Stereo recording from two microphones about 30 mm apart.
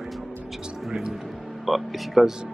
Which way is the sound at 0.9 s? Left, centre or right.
Centre.